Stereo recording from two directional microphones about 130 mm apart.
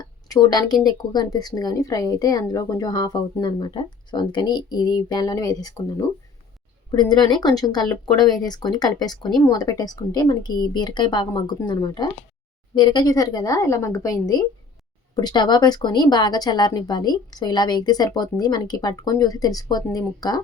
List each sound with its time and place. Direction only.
0.0 s a woman's voice: 30° left (ahead or behind)
7.1 s a woman's voice: 35° left (ahead or behind)